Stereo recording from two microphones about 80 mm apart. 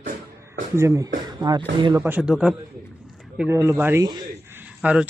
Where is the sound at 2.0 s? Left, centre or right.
Right.